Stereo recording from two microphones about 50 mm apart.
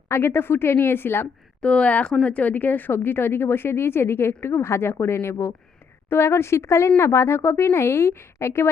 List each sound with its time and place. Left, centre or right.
0.1 s speech: left
1.6 s a woman's voice: left